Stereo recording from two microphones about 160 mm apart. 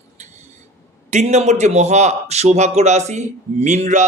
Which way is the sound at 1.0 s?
45° right (ahead or behind).